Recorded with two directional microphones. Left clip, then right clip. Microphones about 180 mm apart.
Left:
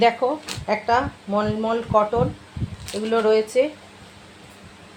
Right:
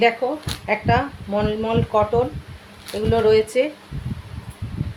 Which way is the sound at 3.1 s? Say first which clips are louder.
Right 2 dB; 5° right (ahead or behind).